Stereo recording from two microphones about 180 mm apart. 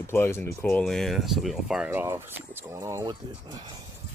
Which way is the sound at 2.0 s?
15° right (ahead or behind).